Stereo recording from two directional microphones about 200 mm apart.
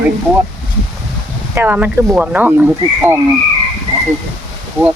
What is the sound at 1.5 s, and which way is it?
Speech, 10° right (ahead or behind).